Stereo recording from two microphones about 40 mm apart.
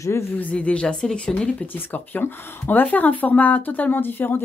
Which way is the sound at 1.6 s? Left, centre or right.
Left.